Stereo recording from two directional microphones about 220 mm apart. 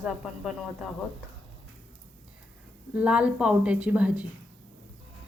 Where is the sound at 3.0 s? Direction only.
5° right (ahead or behind).